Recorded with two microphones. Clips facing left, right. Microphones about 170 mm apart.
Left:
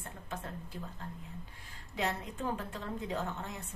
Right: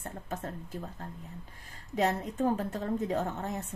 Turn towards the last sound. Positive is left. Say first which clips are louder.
# right 6 dB
turn(degrees=-45)  # may be behind; listen again after turning